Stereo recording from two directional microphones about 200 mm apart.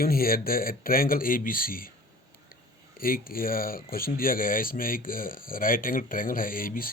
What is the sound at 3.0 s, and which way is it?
Speech, 45° left (ahead or behind).